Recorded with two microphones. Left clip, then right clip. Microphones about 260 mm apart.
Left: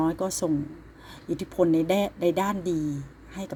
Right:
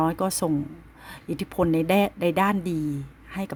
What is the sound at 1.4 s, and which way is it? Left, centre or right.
Speech, right.